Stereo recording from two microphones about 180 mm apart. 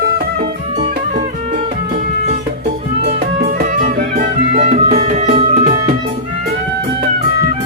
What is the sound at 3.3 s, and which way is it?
Music, 50° right (ahead or behind).